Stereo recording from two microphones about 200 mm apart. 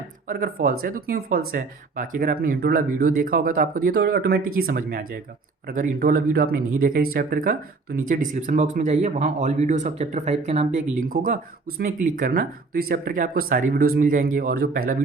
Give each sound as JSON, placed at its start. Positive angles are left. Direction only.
{"t": 0.3, "sound": "speech", "side_deg": -45}